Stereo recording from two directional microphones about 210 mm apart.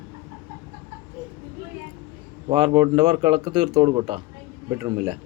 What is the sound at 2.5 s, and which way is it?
Speech, 25° right (ahead or behind).